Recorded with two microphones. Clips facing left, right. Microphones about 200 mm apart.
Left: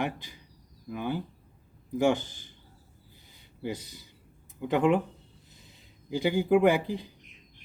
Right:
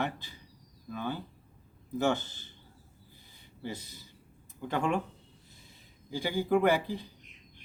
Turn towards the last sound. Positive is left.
turn(degrees=15)  # may be behind; listen again after turning